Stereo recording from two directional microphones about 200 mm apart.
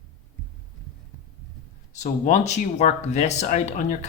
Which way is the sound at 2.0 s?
35° left (ahead or behind).